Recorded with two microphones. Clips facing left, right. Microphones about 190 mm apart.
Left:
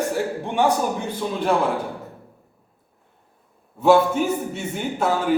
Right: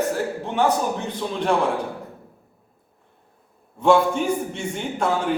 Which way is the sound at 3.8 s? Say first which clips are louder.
Left 1 dB; 5° left (ahead or behind).